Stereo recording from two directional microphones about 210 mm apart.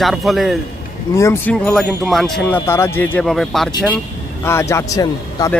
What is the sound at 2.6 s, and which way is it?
A man's voice, 10° left (ahead or behind).